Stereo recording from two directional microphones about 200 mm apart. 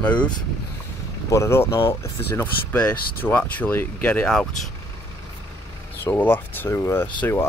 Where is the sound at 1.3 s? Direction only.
15° left (ahead or behind).